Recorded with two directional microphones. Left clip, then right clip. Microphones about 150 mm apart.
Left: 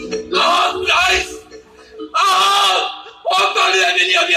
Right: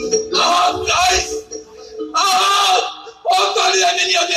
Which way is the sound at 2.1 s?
20° left (ahead or behind).